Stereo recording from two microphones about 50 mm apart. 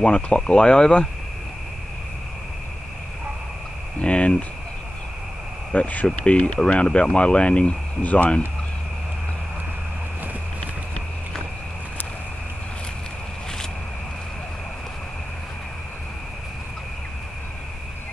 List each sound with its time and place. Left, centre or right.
0.0 s speech: centre
4.0 s a sound: left
5.7 s speech: left